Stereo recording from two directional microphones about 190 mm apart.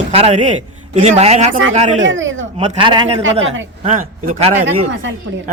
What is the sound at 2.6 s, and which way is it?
Speech, 25° right (ahead or behind).